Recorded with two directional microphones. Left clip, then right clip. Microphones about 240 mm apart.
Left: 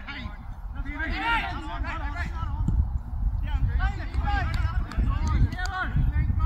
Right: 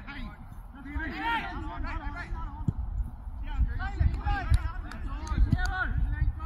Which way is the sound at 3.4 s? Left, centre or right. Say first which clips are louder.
Left 4 dB; centre.